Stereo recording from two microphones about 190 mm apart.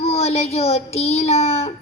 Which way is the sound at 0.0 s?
30° left (ahead or behind).